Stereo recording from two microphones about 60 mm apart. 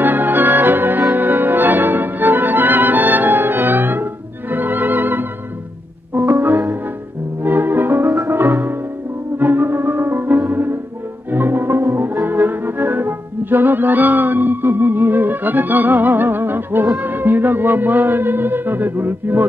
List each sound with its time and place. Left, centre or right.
0.0 s music: right
7.4 s music: right